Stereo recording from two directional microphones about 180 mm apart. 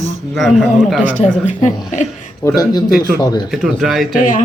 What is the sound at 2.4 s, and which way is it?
Speech, 15° left (ahead or behind).